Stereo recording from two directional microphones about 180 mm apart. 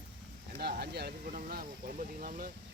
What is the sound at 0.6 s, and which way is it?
Speech, 65° right (ahead or behind).